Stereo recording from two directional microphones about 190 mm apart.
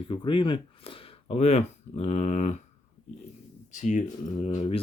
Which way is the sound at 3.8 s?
40° left (ahead or behind).